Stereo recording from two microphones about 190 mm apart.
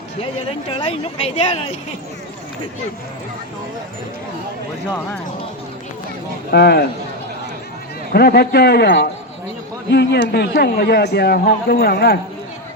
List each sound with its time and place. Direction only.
0.7 s a woman's voice: 30° left (ahead or behind)
6.5 s a man's voice: 60° left (ahead or behind)
8.1 s a man's voice: 55° left (ahead or behind)